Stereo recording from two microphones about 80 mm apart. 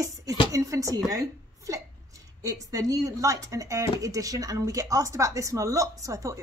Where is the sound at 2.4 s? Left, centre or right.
Right.